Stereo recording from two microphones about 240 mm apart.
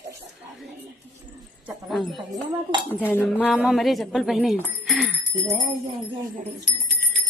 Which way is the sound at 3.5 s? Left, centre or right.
Centre.